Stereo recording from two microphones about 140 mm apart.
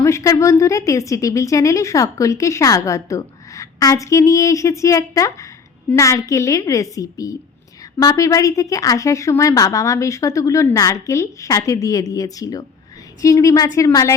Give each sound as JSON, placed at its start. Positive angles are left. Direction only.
{"t": 0.0, "sound": "a woman's voice", "side_deg": 20}